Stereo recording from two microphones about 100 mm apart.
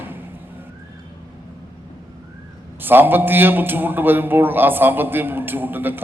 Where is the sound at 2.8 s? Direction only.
20° right (ahead or behind).